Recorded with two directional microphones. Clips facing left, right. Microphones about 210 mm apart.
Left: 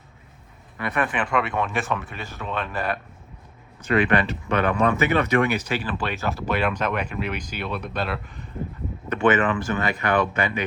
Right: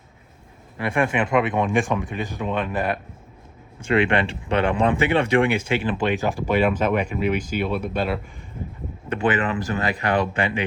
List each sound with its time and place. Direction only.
0.8 s speech: 25° right (ahead or behind); by 8.4 s 10° right (ahead or behind)
9.0 s speech: 35° right (ahead or behind)